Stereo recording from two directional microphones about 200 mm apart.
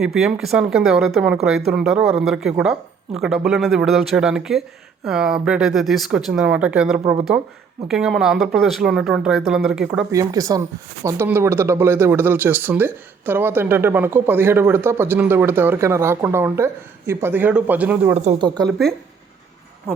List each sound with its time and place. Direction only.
0.0 s speech: 5° right (ahead or behind)
10.1 s speech: 15° right (ahead or behind)
18.2 s speech: 35° right (ahead or behind)
18.4 s a woman's voice: 20° right (ahead or behind)